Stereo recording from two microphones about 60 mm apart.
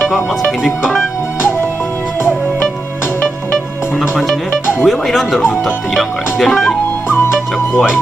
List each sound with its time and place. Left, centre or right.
0.1 s speech: centre
4.8 s speech: centre
7.1 s music: left